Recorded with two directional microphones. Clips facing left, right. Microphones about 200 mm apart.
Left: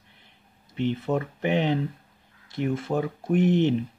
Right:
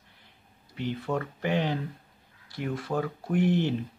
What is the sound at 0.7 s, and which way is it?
Speech, 20° left (ahead or behind).